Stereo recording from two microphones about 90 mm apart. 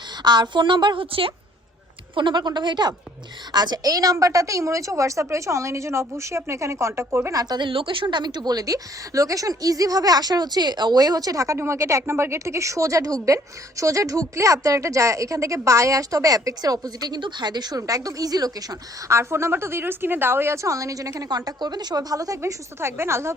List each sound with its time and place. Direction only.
0.2 s a woman's voice: 55° right (ahead or behind); by 1.3 s 75° right (ahead or behind)
2.1 s a woman's voice: 60° right (ahead or behind); by 7.3 s 30° right (ahead or behind)
7.3 s speech: 50° right (ahead or behind)
7.7 s a woman's voice: 75° right (ahead or behind); by 17.2 s 45° right (ahead or behind)
17.2 s speech: 60° right (ahead or behind); by 19.1 s 45° right (ahead or behind)
19.1 s a woman's voice: 30° right (ahead or behind)